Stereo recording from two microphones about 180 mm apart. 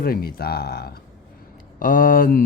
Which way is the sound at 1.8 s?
50° left (ahead or behind).